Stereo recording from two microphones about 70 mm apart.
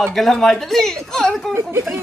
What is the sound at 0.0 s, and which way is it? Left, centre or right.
A woman's voice, centre.